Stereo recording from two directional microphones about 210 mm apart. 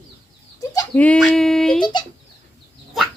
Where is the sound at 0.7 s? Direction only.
10° left (ahead or behind).